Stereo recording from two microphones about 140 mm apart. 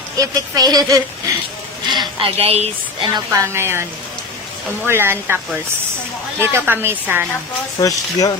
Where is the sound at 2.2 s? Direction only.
45° right (ahead or behind).